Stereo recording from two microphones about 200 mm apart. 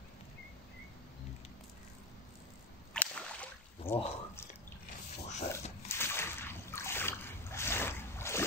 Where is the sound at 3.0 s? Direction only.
5° left (ahead or behind).